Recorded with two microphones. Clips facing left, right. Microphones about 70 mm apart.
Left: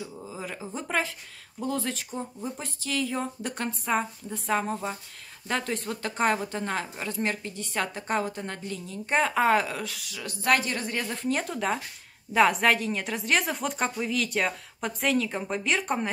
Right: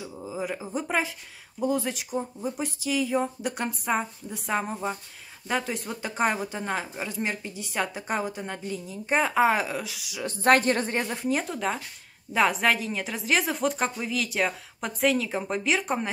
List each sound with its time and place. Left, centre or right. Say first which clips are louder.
0.0 s speech: right 4 dB; centre
10.2 s a woman's voice: right 5 dB; right
11.1 s a woman's voice: right 1 dB; centre